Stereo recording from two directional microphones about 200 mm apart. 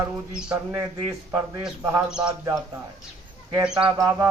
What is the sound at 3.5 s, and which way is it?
Speech, 5° right (ahead or behind).